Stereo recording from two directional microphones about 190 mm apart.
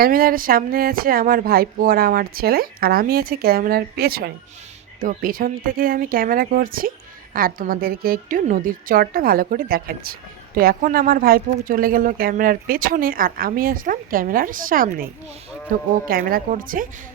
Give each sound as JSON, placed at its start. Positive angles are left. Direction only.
{"t": 0.0, "sound": "a woman's voice", "side_deg": -50}
{"t": 16.0, "sound": "a woman's voice", "side_deg": -50}